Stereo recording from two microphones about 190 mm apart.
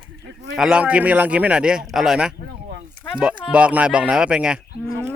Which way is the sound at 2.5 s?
55° right (ahead or behind).